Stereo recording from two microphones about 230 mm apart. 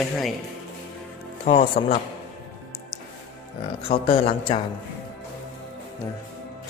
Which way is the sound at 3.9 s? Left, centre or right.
Left.